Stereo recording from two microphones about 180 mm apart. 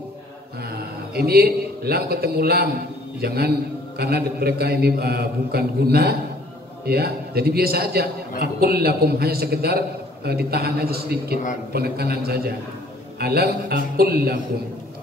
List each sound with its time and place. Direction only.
0.7 s a man's voice: 60° right (ahead or behind)